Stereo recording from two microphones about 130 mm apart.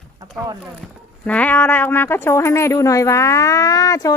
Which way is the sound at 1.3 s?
10° left (ahead or behind).